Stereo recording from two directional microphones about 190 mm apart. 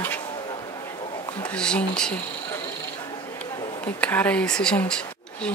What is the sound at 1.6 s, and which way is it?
Speech, 5° left (ahead or behind).